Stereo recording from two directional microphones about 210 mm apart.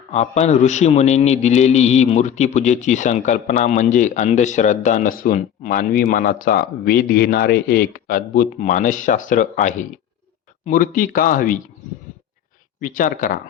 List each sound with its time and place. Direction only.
0.1 s a man's voice: 30° left (ahead or behind)
12.8 s a man's voice: 40° left (ahead or behind)